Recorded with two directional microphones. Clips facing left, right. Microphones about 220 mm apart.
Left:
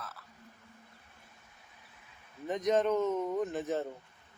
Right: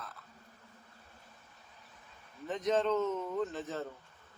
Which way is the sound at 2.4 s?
15° left (ahead or behind).